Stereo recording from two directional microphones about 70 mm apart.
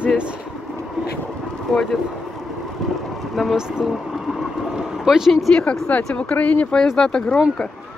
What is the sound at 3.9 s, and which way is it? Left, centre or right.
Boat, centre.